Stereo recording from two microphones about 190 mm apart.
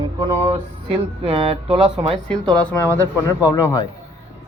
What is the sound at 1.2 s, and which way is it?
Speech, 30° right (ahead or behind).